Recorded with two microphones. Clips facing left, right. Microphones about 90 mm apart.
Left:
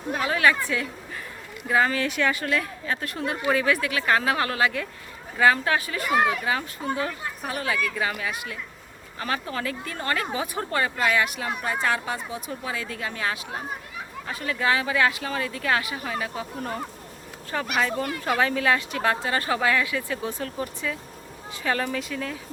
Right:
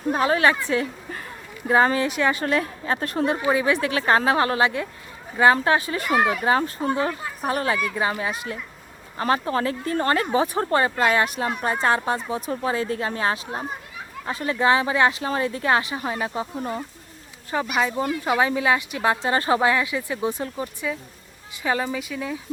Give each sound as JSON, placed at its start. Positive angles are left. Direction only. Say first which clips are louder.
{"t": 0.1, "sound": "speech", "louder": "right 3 dB", "side_deg": -35}
{"t": 0.7, "sound": "a sound", "louder": "right 5 dB", "side_deg": -35}
{"t": 1.6, "sound": "speech", "louder": "right 4 dB", "side_deg": -30}
{"t": 3.5, "sound": "speech", "louder": "left 2 dB", "side_deg": -20}
{"t": 6.1, "sound": "speech", "louder": "right 1 dB", "side_deg": -5}
{"t": 6.4, "sound": "speech", "louder": "right 6 dB", "side_deg": -35}
{"t": 17.7, "sound": "speech", "louder": "right 2 dB", "side_deg": -15}